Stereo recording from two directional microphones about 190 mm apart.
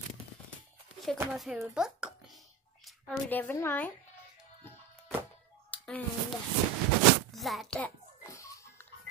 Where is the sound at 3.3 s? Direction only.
10° left (ahead or behind).